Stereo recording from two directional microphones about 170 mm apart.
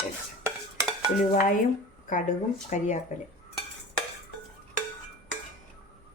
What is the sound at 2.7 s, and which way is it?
Speech, 45° left (ahead or behind).